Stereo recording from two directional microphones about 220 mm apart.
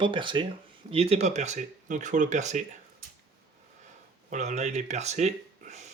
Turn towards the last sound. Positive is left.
turn(degrees=-30)  # may be behind; listen again after turning